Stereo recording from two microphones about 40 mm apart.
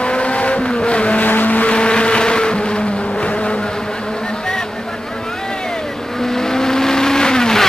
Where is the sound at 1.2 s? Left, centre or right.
Left.